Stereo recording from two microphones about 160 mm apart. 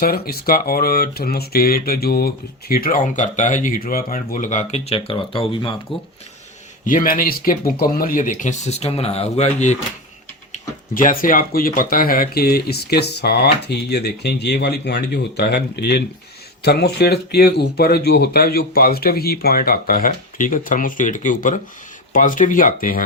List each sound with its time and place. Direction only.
0.0 s speech: 70° left (ahead or behind); by 5.7 s 35° left (ahead or behind)
6.8 s speech: 60° left (ahead or behind)
10.5 s speech: 55° left (ahead or behind)